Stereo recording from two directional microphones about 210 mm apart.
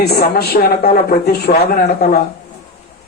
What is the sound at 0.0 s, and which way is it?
A woman's voice, 50° left (ahead or behind).